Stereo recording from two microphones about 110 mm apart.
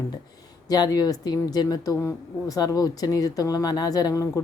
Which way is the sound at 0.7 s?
35° left (ahead or behind).